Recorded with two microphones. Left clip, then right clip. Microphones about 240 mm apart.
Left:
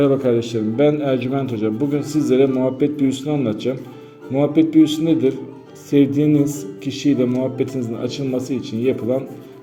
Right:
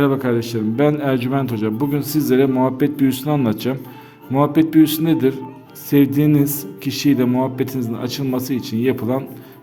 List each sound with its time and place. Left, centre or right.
0.0 s a man's voice: right